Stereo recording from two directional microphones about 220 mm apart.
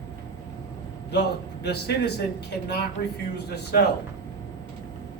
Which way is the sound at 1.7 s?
45° left (ahead or behind).